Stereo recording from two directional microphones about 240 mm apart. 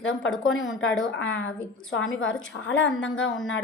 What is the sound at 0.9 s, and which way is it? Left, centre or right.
Speech, centre.